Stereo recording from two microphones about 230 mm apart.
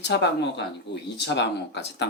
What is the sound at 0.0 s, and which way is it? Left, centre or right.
Speech, left.